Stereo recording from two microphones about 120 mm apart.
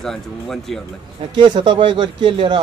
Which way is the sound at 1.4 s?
40° right (ahead or behind).